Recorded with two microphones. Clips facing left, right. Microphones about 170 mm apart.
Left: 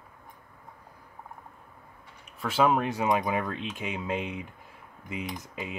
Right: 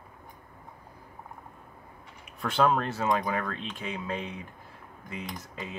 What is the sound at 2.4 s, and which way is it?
Speech, 5° left (ahead or behind).